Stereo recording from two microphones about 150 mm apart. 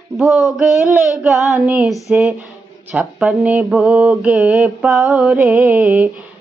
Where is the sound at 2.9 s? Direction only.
10° right (ahead or behind).